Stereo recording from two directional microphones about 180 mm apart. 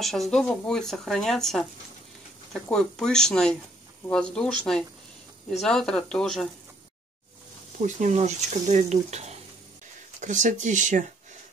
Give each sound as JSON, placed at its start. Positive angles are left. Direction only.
{"t": 0.0, "sound": "speech", "side_deg": 0}
{"t": 7.8, "sound": "speech", "side_deg": -40}